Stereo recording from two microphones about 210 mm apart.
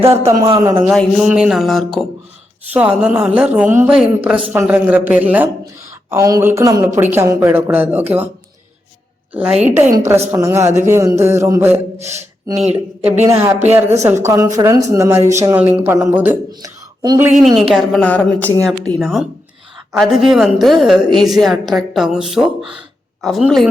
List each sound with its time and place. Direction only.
0.6 s a woman's voice: 10° right (ahead or behind)
9.3 s a woman's voice: 5° right (ahead or behind)
11.7 s a sound: 30° right (ahead or behind)
12.5 s a woman's voice: 5° right (ahead or behind)
16.5 s speech: 20° right (ahead or behind)
17.2 s a woman's voice: 5° right (ahead or behind)